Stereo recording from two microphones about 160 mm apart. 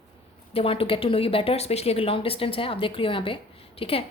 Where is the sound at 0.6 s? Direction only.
35° left (ahead or behind).